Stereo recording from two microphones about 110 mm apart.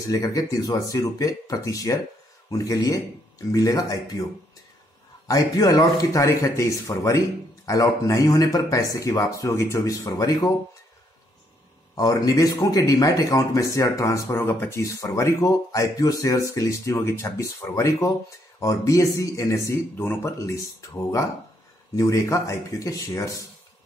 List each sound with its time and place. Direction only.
0.0 s speech: 35° left (ahead or behind)
5.3 s speech: 35° left (ahead or behind)
11.9 s speech: 35° left (ahead or behind)